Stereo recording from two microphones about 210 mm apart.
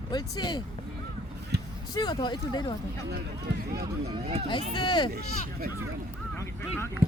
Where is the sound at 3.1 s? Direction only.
50° right (ahead or behind).